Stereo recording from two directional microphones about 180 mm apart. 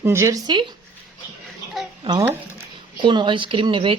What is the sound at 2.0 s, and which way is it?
A woman's voice, 20° right (ahead or behind).